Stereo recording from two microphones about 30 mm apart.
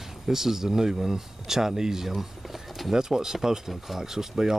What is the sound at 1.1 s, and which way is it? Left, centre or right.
Speech, centre.